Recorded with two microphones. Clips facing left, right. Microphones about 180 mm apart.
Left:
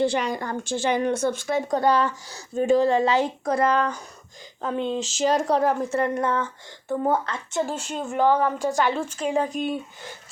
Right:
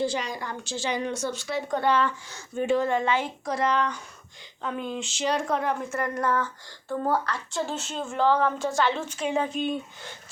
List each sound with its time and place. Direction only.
0.0 s a woman's voice: 60° left (ahead or behind)
1.7 s speech: 40° left (ahead or behind)
3.4 s a woman's voice: 55° left (ahead or behind)
4.6 s speech: 30° left (ahead or behind)
7.7 s a woman's voice: 10° left (ahead or behind)
9.1 s speech: centre (ahead or behind)